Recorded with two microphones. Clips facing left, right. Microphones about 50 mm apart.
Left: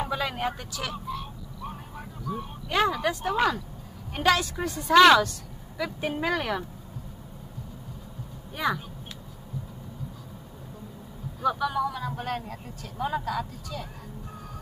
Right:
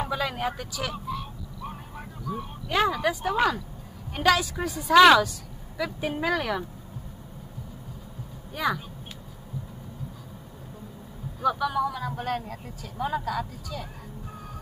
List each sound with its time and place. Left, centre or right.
0.0 s vehicle: centre
4.1 s speech: centre
8.5 s speech: centre
11.4 s speech: centre